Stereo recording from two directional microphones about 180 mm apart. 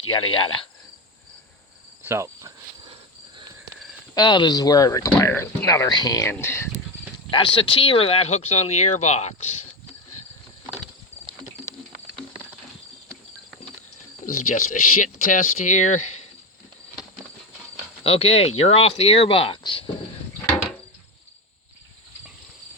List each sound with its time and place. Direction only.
0.1 s speech: 30° left (ahead or behind)
2.0 s insect: 15° right (ahead or behind)
2.8 s cricket: 25° right (ahead or behind)
4.1 s speech: 25° left (ahead or behind)
7.3 s speech: 30° left (ahead or behind)
14.3 s speech: 45° left (ahead or behind)
18.0 s speech: 30° left (ahead or behind)